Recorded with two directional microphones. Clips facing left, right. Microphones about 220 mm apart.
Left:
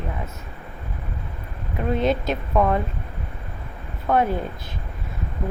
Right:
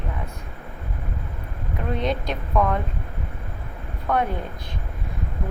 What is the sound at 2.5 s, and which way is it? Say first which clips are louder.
Speech: left 2 dB; 25° left (ahead or behind).